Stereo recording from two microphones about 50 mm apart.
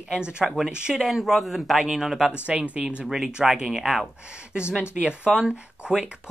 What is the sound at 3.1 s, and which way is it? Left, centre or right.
Speech, centre.